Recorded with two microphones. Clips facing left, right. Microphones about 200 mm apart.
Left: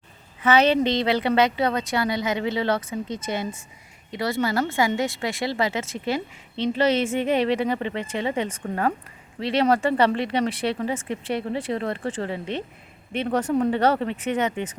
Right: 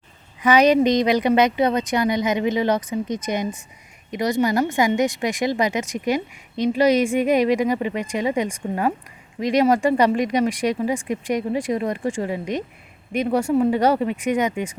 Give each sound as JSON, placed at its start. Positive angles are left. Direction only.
{"t": 0.4, "sound": "speech", "side_deg": -15}